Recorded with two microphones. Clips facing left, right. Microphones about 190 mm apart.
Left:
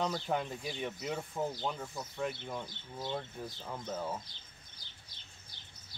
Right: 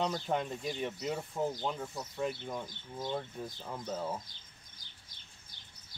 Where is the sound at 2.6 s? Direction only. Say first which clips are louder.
Right 2 dB; 15° right (ahead or behind).